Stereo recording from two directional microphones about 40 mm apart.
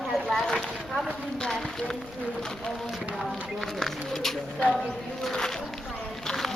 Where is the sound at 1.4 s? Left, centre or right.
Centre.